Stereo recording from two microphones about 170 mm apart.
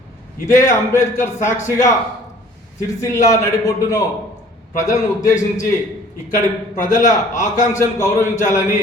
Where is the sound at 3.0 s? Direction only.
20° left (ahead or behind).